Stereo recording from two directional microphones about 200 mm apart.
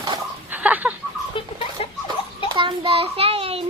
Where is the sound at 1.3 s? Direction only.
25° left (ahead or behind).